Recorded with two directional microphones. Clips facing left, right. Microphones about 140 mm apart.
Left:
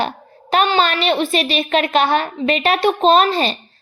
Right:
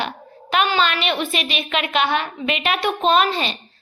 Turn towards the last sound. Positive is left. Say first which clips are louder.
# left 4 dB
turn(degrees=40)  # may be behind; listen again after turning